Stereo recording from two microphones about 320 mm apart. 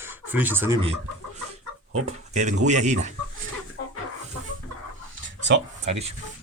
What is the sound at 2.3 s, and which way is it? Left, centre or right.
Speech, right.